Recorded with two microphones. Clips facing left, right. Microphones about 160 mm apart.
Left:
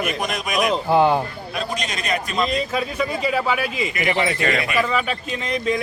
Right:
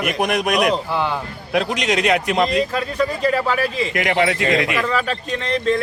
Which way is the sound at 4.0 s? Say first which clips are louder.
Right 3 dB; 85° right.